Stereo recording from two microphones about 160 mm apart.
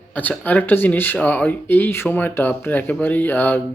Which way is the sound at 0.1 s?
10° left (ahead or behind).